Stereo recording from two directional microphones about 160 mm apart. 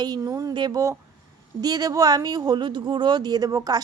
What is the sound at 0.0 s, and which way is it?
Speech, 25° right (ahead or behind).